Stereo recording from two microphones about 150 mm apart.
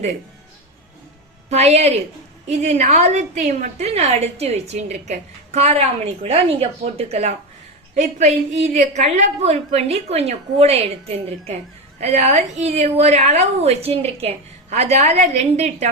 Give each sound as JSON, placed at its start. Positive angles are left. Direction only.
{"t": 1.5, "sound": "a woman's voice", "side_deg": -45}
{"t": 8.7, "sound": "a woman's voice", "side_deg": -50}